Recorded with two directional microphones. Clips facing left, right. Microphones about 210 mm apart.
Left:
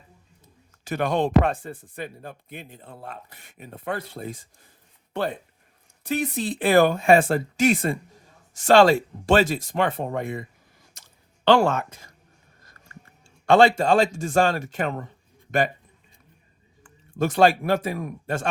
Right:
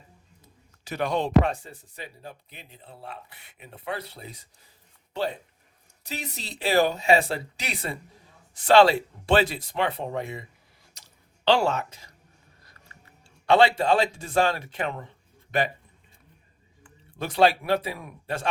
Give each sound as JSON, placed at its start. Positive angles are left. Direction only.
{"t": 0.9, "sound": "speech", "side_deg": 50}
{"t": 10.9, "sound": "chewing", "side_deg": 50}
{"t": 13.2, "sound": "speech", "side_deg": 45}
{"t": 16.8, "sound": "speech", "side_deg": 45}